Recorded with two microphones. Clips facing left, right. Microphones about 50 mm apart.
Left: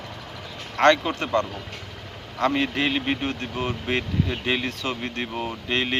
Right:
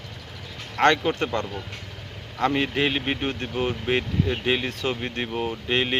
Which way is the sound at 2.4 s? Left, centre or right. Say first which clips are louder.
Even; centre.